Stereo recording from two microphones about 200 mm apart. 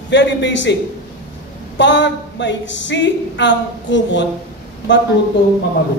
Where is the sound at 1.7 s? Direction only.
65° left (ahead or behind).